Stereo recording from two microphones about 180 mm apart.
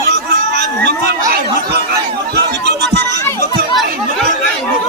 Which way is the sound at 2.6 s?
70° right (ahead or behind).